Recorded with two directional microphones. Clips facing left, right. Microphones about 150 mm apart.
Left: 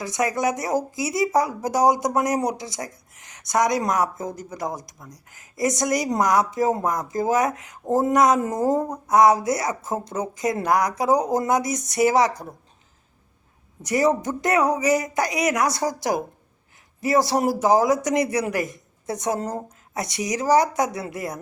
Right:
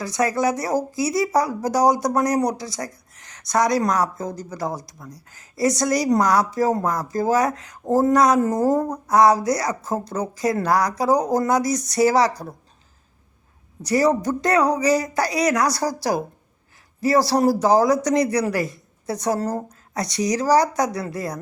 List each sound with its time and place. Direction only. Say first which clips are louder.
0.0 s speech: right 2 dB; 20° left (ahead or behind)
13.8 s speech: right 2 dB; 20° left (ahead or behind)